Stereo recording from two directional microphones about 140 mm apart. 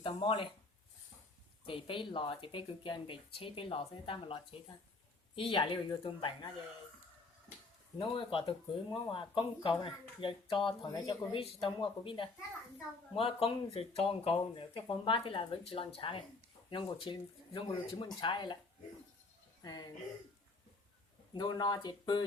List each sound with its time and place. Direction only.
0.0 s speech: 40° left (ahead or behind)
1.6 s speech: 40° left (ahead or behind)
5.4 s speech: 35° left (ahead or behind)
7.9 s speech: 40° left (ahead or behind)
19.6 s speech: 30° left (ahead or behind)
21.3 s speech: 35° left (ahead or behind)